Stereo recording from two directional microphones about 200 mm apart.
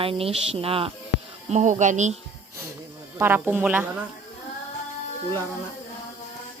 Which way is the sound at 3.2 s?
10° right (ahead or behind).